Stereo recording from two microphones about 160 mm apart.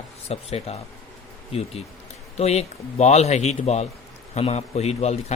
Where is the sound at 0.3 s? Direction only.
40° left (ahead or behind).